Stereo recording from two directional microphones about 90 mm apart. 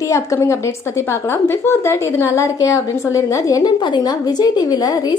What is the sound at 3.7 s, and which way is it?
A woman's voice, 55° left (ahead or behind).